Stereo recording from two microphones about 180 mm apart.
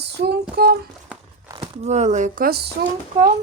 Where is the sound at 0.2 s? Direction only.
60° right (ahead or behind).